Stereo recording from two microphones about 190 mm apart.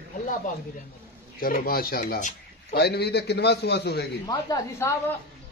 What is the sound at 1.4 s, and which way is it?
A man's voice, 50° left (ahead or behind).